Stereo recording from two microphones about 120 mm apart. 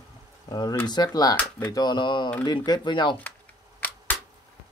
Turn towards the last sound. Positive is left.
turn(degrees=15)  # may be behind; listen again after turning